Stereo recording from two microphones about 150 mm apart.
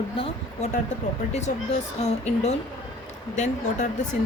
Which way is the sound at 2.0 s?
45° left (ahead or behind).